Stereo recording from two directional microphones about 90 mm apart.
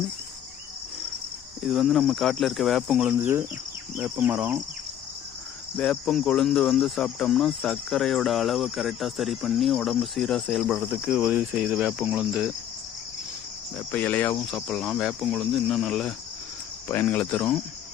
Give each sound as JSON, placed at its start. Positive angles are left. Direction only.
{"t": 1.6, "sound": "cricket", "side_deg": -5}
{"t": 3.1, "sound": "speech", "side_deg": -25}
{"t": 5.7, "sound": "cricket", "side_deg": 10}
{"t": 11.2, "sound": "speech", "side_deg": -15}
{"t": 13.7, "sound": "cricket", "side_deg": 20}
{"t": 14.4, "sound": "cricket", "side_deg": 5}
{"t": 16.9, "sound": "speech", "side_deg": 20}